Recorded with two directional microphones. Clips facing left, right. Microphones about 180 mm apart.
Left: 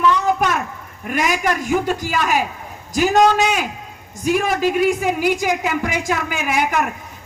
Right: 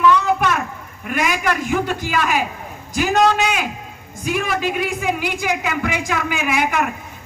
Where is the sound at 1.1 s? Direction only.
45° left (ahead or behind).